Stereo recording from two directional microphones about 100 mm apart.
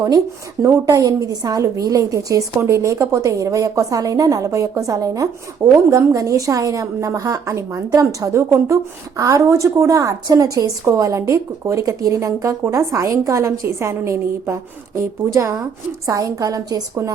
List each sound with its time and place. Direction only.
0.6 s a woman's voice: 30° right (ahead or behind)